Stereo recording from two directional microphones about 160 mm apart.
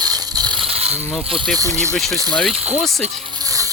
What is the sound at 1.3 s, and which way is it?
Speech, 5° left (ahead or behind).